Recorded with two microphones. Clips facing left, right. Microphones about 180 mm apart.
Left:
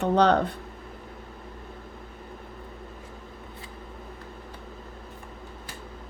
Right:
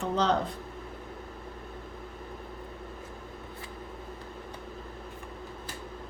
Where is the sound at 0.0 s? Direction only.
65° left (ahead or behind).